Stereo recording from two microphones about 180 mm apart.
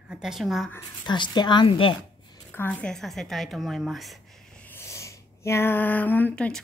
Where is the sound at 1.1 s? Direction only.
25° left (ahead or behind).